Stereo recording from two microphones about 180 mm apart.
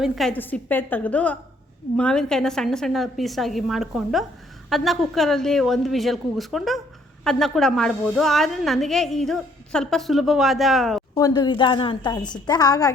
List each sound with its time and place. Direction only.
0.0 s a woman's voice: 5° left (ahead or behind)
11.1 s a woman's voice: 25° left (ahead or behind)